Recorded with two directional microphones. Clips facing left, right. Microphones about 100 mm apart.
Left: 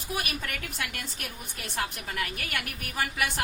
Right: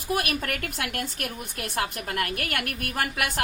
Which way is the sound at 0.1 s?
60° right (ahead or behind).